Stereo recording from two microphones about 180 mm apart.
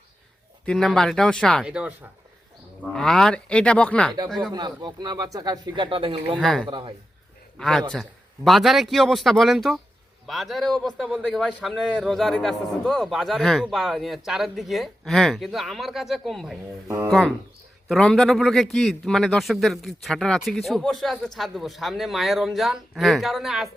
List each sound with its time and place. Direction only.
0.6 s a man's voice: 5° left (ahead or behind)
4.5 s speech: 25° right (ahead or behind)
6.2 s a man's voice: centre (ahead or behind)
6.7 s speech: 25° right (ahead or behind)
7.6 s a man's voice: centre (ahead or behind)